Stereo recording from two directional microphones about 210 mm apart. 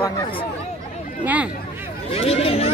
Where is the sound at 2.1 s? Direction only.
30° left (ahead or behind).